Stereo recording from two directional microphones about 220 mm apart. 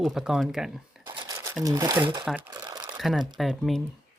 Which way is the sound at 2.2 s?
10° right (ahead or behind).